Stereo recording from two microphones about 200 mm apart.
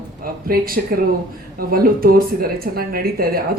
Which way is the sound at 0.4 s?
45° right (ahead or behind).